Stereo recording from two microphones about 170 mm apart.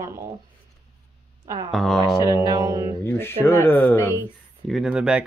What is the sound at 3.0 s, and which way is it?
Speech, 15° left (ahead or behind).